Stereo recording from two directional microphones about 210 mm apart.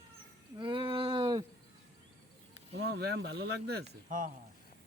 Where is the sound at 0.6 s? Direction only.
20° right (ahead or behind).